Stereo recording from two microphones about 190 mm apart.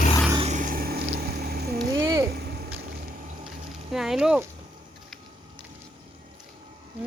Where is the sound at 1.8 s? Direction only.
20° right (ahead or behind).